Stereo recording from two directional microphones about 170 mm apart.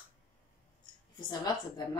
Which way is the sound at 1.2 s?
25° left (ahead or behind).